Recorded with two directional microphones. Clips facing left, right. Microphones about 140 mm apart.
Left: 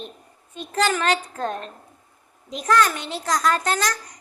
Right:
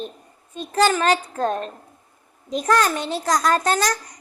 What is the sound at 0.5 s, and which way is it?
A child's voice, 35° right (ahead or behind).